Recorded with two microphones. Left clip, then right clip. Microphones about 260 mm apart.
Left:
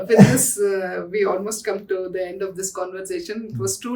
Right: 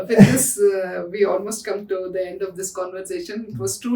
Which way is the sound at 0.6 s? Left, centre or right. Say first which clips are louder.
Right 3 dB; centre.